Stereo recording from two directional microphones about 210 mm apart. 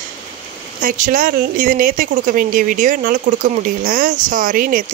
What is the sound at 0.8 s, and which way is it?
Speech, 40° right (ahead or behind).